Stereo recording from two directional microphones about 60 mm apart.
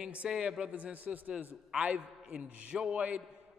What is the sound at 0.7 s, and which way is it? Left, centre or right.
A man's voice, right.